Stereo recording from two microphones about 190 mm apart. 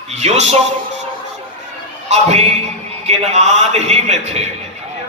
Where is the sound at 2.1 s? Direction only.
35° right (ahead or behind).